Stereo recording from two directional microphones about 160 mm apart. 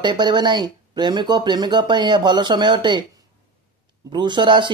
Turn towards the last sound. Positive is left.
turn(degrees=-30)  # may be behind; listen again after turning